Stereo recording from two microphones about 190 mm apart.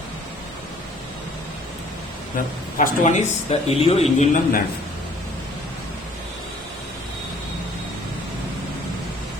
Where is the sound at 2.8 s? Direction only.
40° left (ahead or behind).